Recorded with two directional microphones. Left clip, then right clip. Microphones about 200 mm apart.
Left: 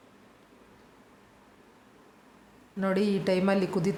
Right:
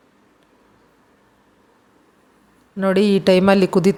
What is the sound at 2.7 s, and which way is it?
Speech, 35° right (ahead or behind).